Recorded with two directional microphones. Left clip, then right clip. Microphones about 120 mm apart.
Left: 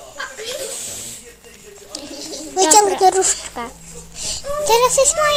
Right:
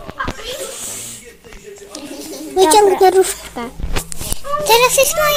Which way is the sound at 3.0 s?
35° right (ahead or behind).